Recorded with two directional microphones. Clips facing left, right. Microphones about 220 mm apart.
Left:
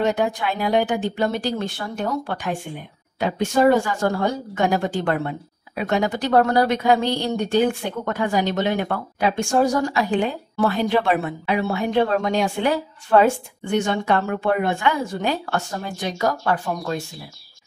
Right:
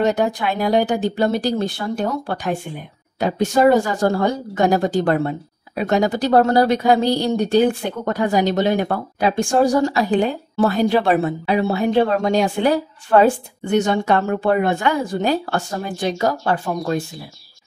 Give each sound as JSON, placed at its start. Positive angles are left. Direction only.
{"t": 0.0, "sound": "a woman's voice", "side_deg": -40}